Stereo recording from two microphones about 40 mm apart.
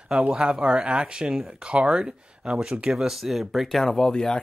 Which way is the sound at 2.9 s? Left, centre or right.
Centre.